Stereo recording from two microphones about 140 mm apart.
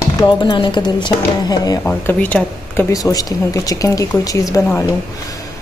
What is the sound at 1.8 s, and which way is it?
Speech, 10° left (ahead or behind).